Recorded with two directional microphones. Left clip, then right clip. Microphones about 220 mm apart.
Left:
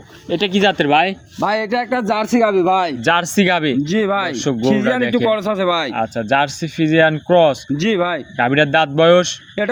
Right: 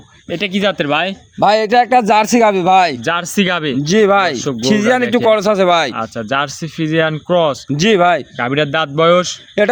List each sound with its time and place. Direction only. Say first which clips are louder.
0.3 s speech: left 1 dB; 15° right (ahead or behind)
1.4 s a man's voice: right 8 dB; 45° right (ahead or behind)
3.0 s speech: left 2 dB; centre (ahead or behind)
3.3 s speech: even; 10° right (ahead or behind)
3.8 s a man's voice: right 7 dB; 50° right (ahead or behind)
6.0 s speech: left 1 dB; 10° right (ahead or behind)
7.8 s a man's voice: right 12 dB; 55° right (ahead or behind)
8.4 s speech: left 2 dB; 5° right (ahead or behind)
9.6 s a man's voice: right 7 dB; 50° right (ahead or behind)